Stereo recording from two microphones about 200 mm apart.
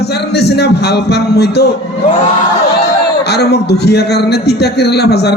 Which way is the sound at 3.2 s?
55° left (ahead or behind).